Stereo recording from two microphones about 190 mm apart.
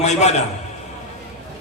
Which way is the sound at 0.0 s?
35° left (ahead or behind).